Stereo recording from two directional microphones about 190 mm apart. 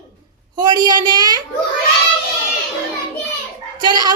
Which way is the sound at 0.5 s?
20° right (ahead or behind).